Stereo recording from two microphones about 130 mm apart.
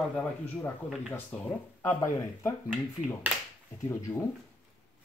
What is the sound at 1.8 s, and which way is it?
Speech, 20° left (ahead or behind).